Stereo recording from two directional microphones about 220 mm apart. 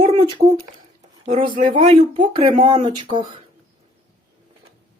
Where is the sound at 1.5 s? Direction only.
35° right (ahead or behind).